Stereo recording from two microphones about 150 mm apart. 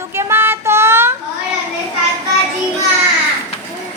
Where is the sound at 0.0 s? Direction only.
15° right (ahead or behind).